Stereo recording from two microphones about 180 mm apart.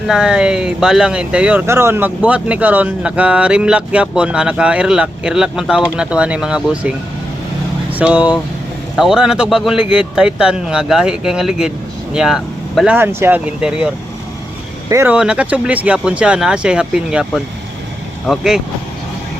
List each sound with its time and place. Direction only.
0.1 s speech: 5° right (ahead or behind)